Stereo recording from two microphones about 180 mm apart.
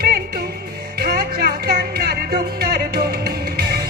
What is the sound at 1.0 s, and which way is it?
Music, 60° right (ahead or behind).